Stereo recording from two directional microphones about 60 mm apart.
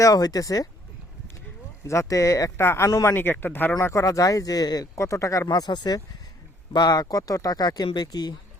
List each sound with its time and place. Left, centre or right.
0.0 s speech: left
1.9 s speech: left
2.6 s speech: left
2.8 s speech: left
3.2 s speech: left
3.9 s speech: left
4.9 s speech: left